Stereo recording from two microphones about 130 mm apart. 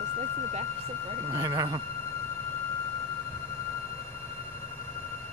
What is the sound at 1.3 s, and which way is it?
Speech, 30° right (ahead or behind).